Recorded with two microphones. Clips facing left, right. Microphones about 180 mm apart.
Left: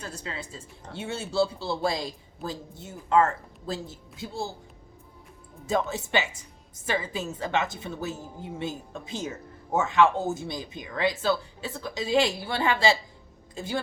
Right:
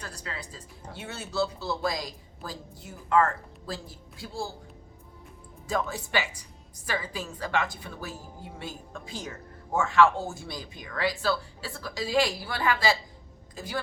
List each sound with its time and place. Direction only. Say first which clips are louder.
0.0 s speech: left 3 dB; 25° left (ahead or behind)
5.6 s speech: left 3 dB; 25° left (ahead or behind)